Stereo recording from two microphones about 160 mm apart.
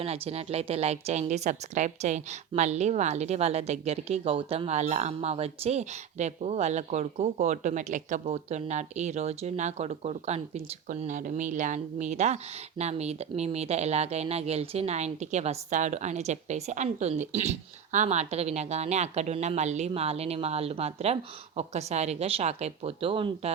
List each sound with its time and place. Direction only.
0.0 s a woman's voice: 40° right (ahead or behind)